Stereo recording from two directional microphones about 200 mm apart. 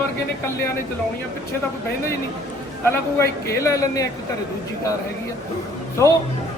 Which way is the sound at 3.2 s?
15° left (ahead or behind).